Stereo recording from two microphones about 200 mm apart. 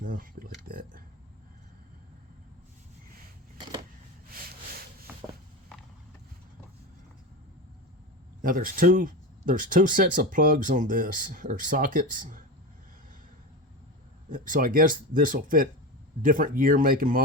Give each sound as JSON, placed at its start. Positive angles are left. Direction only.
{"t": 0.0, "sound": "speech", "side_deg": -45}
{"t": 0.7, "sound": "a sound", "side_deg": -45}
{"t": 5.1, "sound": "walk", "side_deg": -10}
{"t": 8.4, "sound": "speech", "side_deg": -45}
{"t": 14.3, "sound": "speech", "side_deg": -40}